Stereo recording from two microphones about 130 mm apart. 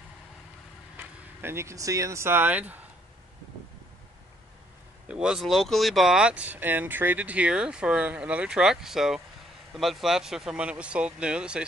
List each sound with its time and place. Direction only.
0.9 s speech: 20° right (ahead or behind)
5.0 s speech: 5° right (ahead or behind)